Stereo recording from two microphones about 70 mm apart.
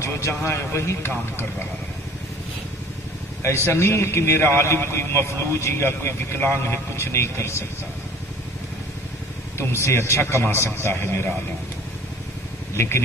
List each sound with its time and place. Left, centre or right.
0.0 s a man's voice: left
3.6 s a man's voice: left
9.6 s a man's voice: left
12.7 s speech: left